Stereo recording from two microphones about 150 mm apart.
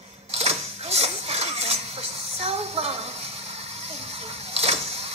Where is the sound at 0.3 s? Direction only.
45° right (ahead or behind).